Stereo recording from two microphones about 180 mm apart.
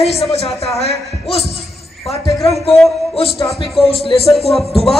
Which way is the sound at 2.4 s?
35° left (ahead or behind).